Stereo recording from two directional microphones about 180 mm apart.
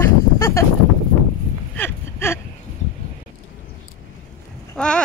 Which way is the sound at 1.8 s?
15° left (ahead or behind).